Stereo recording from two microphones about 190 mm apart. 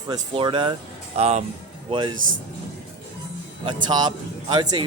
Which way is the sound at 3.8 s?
25° right (ahead or behind).